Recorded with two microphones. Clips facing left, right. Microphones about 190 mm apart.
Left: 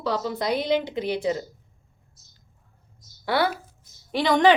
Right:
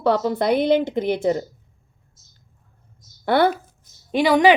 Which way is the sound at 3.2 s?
55° right (ahead or behind).